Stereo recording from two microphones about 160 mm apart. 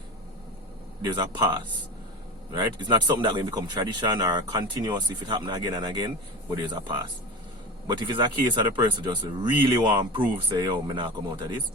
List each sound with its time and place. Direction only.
1.0 s speech: 30° right (ahead or behind)